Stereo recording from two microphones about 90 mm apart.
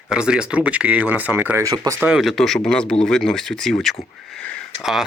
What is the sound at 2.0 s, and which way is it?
Speech, 15° right (ahead or behind).